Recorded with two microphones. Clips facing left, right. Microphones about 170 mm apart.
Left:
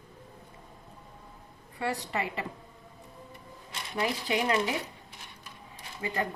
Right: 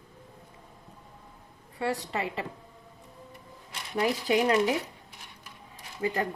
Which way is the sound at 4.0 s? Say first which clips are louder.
Right 4 dB; 45° right (ahead or behind).